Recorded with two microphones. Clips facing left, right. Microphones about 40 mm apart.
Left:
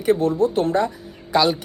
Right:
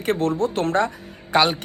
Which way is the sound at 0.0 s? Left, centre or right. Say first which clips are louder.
Left 3 dB; right.